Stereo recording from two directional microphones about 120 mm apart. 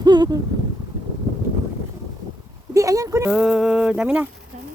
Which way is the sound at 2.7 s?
25° right (ahead or behind).